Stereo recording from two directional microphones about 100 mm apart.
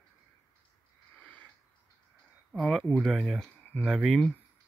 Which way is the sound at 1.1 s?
15° left (ahead or behind).